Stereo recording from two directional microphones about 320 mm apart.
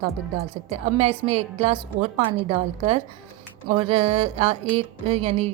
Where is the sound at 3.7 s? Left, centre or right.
Centre.